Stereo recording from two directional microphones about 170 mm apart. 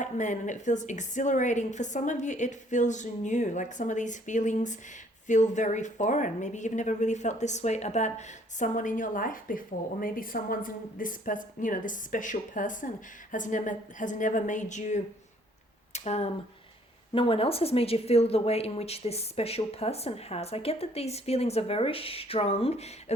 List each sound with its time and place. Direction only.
0.0 s a woman's voice: 45° left (ahead or behind)